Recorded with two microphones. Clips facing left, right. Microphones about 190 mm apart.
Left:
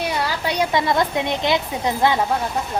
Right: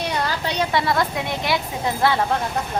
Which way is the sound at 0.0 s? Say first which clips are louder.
Left 1 dB; 10° left (ahead or behind).